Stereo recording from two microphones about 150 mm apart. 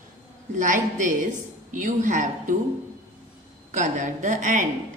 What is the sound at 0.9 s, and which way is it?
A woman's voice, 55° right (ahead or behind).